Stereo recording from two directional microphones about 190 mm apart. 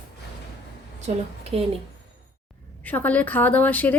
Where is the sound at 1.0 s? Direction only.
35° right (ahead or behind).